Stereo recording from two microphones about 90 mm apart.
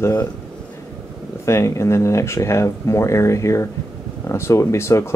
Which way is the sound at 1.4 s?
35° left (ahead or behind).